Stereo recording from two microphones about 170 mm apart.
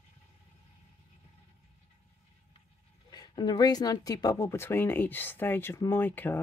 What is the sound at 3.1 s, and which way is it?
Speech, 25° left (ahead or behind).